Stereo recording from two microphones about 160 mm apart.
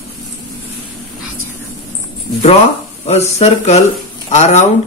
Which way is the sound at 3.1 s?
40° left (ahead or behind).